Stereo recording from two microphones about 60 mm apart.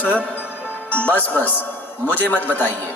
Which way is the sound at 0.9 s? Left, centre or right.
Left.